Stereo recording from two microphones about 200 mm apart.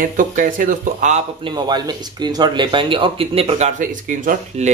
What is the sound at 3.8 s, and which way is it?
Speech, 40° right (ahead or behind).